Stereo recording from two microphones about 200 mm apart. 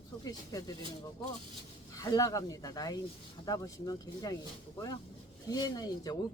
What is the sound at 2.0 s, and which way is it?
Speech, 15° left (ahead or behind).